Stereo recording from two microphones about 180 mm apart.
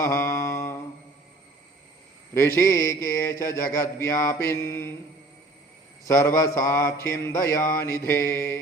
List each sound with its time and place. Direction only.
0.0 s humming: 15° left (ahead or behind)
2.3 s a man's voice: 15° left (ahead or behind)
6.1 s a man's voice: 15° left (ahead or behind)